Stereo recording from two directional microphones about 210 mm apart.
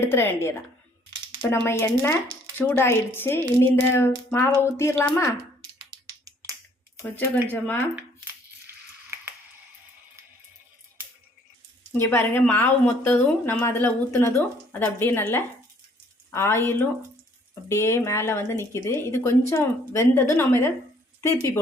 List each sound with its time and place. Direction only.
0.0 s speech: 10° left (ahead or behind)
6.2 s finger snapping: 15° right (ahead or behind)
7.0 s speech: 10° left (ahead or behind)
8.6 s a sound: 10° right (ahead or behind)
11.9 s speech: 10° left (ahead or behind)